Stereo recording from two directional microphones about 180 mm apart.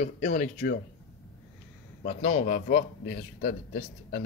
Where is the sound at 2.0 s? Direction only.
40° left (ahead or behind).